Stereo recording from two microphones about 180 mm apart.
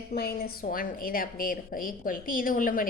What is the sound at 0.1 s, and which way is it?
A woman's voice, 60° left (ahead or behind).